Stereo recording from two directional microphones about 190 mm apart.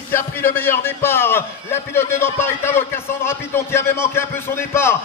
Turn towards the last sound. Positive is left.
turn(degrees=10)  # may be behind; listen again after turning